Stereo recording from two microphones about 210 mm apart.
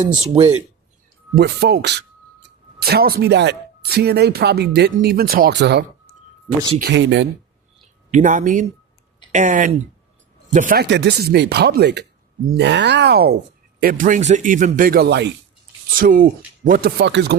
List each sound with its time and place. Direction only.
1.4 s speech: 50° right (ahead or behind)
8.1 s speech: 35° right (ahead or behind)
13.8 s speech: 40° right (ahead or behind)
15.9 s speech: 40° right (ahead or behind)